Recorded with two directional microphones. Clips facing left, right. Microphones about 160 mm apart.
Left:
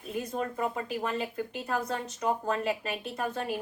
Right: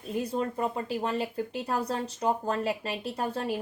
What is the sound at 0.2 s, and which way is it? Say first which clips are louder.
Speech: right 2 dB; 30° right (ahead or behind).